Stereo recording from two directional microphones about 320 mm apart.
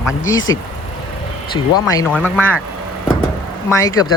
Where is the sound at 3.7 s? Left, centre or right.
Centre.